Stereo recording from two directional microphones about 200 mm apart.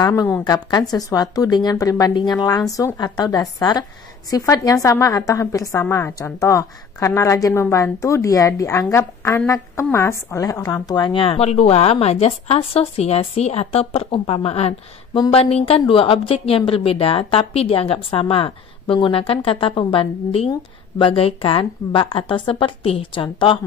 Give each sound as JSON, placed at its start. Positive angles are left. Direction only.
{"t": 0.0, "sound": "a woman's voice", "side_deg": 15}